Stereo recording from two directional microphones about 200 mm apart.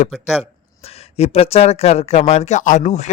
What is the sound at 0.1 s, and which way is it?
Speech, centre (ahead or behind).